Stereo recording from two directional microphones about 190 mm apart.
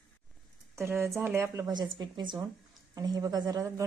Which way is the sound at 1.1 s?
5° right (ahead or behind).